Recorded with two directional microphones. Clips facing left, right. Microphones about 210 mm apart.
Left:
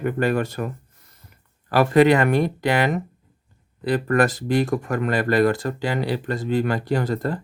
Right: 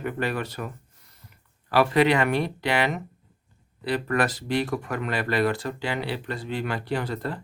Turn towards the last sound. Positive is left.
turn(degrees=45)  # may be behind; listen again after turning